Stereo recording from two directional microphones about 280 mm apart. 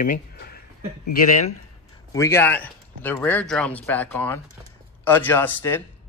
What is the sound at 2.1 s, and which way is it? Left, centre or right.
Speech, centre.